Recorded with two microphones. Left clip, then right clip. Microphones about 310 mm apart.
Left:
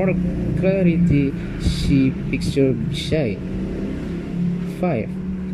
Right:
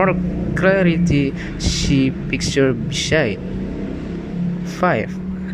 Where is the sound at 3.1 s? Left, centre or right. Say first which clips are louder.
Right 5 dB; right.